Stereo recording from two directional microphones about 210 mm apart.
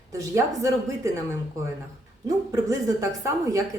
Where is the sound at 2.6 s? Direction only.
15° right (ahead or behind).